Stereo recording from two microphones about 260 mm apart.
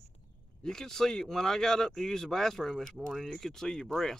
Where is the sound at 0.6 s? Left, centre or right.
Centre.